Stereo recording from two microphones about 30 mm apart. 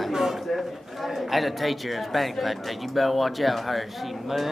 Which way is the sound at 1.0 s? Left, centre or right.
Centre.